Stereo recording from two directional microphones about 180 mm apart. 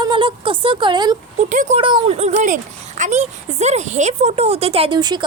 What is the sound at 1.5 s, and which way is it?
Speech, 45° right (ahead or behind).